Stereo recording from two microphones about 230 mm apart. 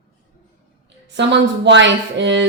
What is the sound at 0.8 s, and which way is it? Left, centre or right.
Speech, right.